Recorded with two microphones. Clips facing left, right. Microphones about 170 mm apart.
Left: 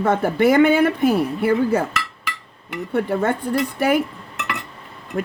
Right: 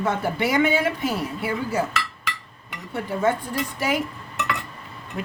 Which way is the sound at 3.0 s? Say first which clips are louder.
Left 3 dB; 60° left (ahead or behind).